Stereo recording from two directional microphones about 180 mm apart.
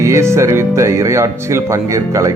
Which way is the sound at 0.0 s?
15° right (ahead or behind).